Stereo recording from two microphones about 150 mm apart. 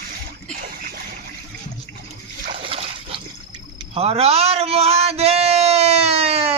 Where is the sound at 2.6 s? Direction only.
40° right (ahead or behind).